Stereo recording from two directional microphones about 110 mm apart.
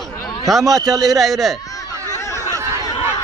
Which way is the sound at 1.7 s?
30° left (ahead or behind).